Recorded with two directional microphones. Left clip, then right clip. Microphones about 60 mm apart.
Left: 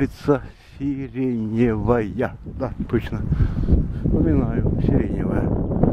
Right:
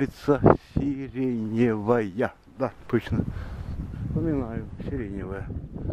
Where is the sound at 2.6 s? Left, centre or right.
Right.